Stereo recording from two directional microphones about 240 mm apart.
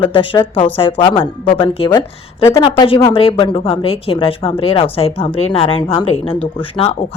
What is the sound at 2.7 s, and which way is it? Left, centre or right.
Speech, left.